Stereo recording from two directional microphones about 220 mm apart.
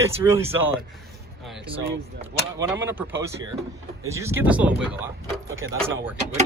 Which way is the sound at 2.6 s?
10° right (ahead or behind).